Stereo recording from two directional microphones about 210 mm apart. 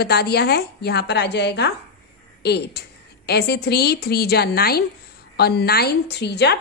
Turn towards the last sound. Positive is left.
turn(degrees=50)  # may be behind; listen again after turning